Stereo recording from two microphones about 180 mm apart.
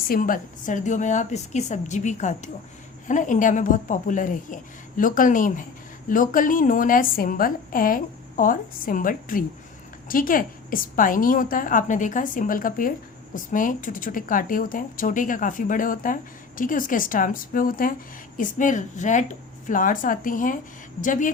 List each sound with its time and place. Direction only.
0.1 s a woman's voice: 50° left (ahead or behind)